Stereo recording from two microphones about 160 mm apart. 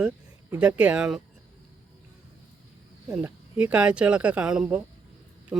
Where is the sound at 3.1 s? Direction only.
10° right (ahead or behind).